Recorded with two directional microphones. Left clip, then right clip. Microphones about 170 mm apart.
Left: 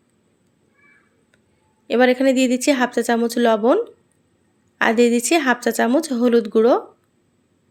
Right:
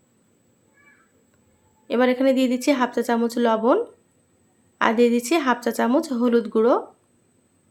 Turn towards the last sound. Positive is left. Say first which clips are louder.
# left 4 dB
turn(degrees=15)  # may be behind; listen again after turning